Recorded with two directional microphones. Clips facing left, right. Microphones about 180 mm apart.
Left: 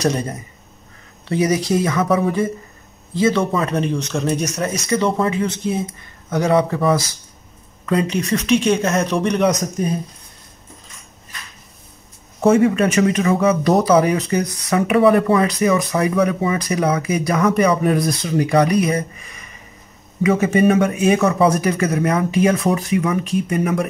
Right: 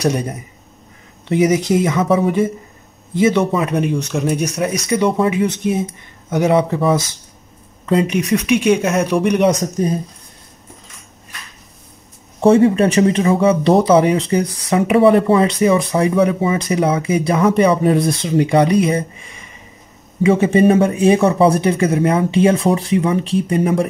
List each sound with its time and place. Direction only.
0.0 s speech: 10° right (ahead or behind)
3.5 s speech: 5° right (ahead or behind)
7.8 s speech: 25° right (ahead or behind)
8.2 s speech: 10° right (ahead or behind)
9.4 s speech: 30° right (ahead or behind)
12.4 s speech: 30° right (ahead or behind)